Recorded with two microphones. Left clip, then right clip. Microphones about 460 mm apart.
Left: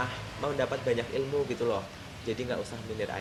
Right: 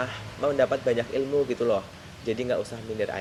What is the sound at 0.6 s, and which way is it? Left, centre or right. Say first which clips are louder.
Speech: right 5 dB; right.